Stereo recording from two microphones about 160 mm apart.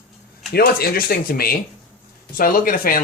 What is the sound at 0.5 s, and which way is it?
Speech, 70° left (ahead or behind).